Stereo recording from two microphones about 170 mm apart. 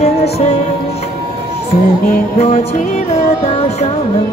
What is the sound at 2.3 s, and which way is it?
Music, 40° left (ahead or behind).